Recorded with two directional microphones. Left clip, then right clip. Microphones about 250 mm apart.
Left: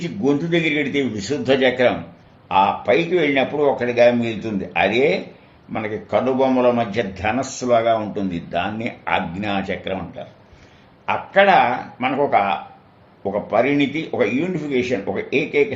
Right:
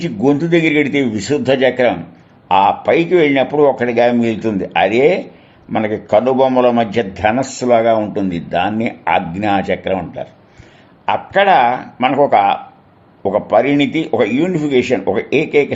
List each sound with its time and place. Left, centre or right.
0.0 s a man's voice: right